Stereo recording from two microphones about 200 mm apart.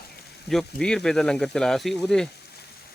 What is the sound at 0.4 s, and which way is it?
Speech, 5° left (ahead or behind).